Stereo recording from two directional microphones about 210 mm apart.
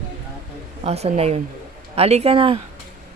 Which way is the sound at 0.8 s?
30° right (ahead or behind).